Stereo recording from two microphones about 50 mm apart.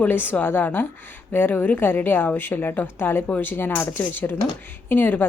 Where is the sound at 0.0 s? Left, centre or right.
Left.